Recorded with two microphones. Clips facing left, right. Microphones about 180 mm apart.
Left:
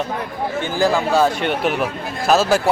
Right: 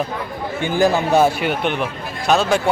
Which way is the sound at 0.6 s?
20° right (ahead or behind).